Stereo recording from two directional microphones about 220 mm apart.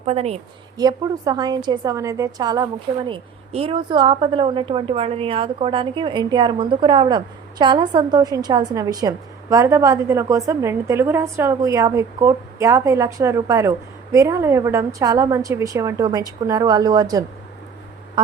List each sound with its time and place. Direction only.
0.0 s a woman's voice: 30° right (ahead or behind)
0.8 s a woman's voice: 15° right (ahead or behind)